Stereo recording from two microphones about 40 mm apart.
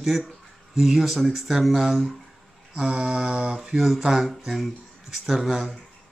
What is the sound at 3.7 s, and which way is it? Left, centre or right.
A man's voice, centre.